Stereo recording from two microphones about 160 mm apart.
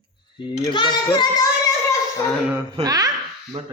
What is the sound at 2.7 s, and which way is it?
Speech, 25° right (ahead or behind).